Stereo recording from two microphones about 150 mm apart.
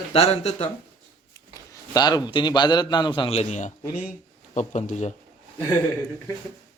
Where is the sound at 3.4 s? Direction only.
55° left (ahead or behind).